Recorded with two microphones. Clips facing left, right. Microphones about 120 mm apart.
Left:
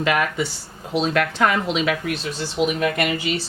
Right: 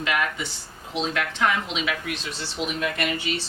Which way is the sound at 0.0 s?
50° left (ahead or behind).